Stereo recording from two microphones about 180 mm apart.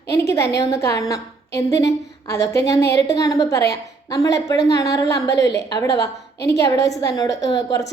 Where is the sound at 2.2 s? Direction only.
20° left (ahead or behind).